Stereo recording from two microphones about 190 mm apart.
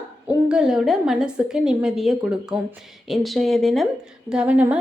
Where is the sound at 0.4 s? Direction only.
5° right (ahead or behind).